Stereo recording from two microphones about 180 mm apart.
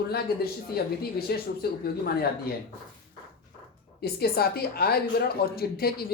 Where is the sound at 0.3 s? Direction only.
60° left (ahead or behind).